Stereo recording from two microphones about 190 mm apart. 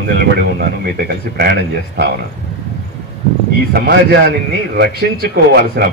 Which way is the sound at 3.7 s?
60° right (ahead or behind).